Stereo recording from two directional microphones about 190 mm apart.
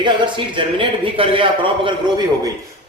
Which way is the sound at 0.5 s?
25° right (ahead or behind).